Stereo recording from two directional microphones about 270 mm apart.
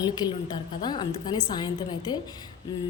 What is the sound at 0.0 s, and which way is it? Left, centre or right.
A woman's voice, centre.